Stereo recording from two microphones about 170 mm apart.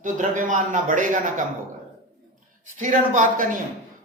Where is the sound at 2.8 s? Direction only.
50° right (ahead or behind).